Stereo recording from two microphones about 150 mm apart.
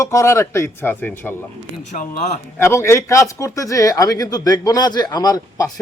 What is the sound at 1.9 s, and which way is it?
Speech, 55° left (ahead or behind).